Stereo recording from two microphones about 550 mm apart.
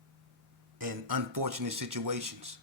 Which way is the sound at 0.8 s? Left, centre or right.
Right.